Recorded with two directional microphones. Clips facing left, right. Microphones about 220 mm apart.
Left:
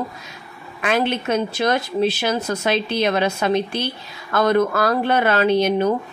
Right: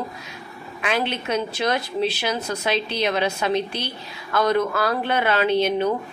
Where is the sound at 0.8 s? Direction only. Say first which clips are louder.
Left 4 dB; 45° left (ahead or behind).